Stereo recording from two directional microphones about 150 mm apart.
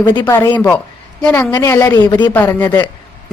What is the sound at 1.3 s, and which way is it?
A woman's voice, 20° left (ahead or behind).